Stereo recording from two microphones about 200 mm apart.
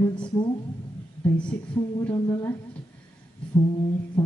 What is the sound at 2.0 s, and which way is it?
Speech, 10° left (ahead or behind).